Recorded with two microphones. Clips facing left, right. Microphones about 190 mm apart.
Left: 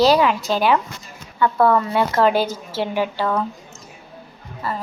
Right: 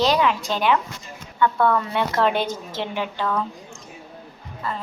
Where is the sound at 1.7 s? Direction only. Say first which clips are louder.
Left 4 dB; 5° left (ahead or behind).